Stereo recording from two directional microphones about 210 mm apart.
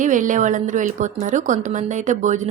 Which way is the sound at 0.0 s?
35° right (ahead or behind).